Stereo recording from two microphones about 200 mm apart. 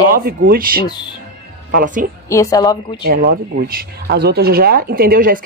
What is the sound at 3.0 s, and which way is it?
Speech, 50° right (ahead or behind).